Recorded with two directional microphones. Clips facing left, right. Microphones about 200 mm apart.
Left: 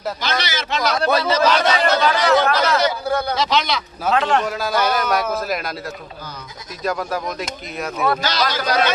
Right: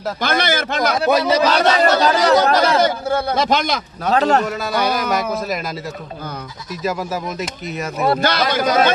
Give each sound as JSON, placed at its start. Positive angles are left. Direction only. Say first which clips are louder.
{"t": 0.2, "sound": "a man's voice", "louder": "right 5 dB", "side_deg": -55}
{"t": 0.9, "sound": "a man's voice", "louder": "right 3 dB", "side_deg": -15}
{"t": 1.5, "sound": "a man's voice", "louder": "right 3 dB", "side_deg": -40}
{"t": 3.3, "sound": "a man's voice", "louder": "right 2 dB", "side_deg": -50}
{"t": 4.1, "sound": "speech", "louder": "right 3 dB", "side_deg": -40}
{"t": 4.4, "sound": "speech", "louder": "even", "side_deg": 0}
{"t": 6.8, "sound": "speech", "louder": "even", "side_deg": -5}
{"t": 8.2, "sound": "a man's voice", "louder": "right 4 dB", "side_deg": -55}